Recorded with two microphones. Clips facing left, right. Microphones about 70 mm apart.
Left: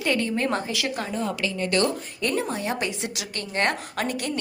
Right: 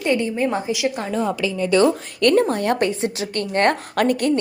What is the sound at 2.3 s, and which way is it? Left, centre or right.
Speech, right.